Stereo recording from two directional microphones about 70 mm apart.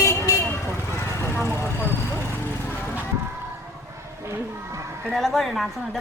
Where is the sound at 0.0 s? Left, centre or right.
Left.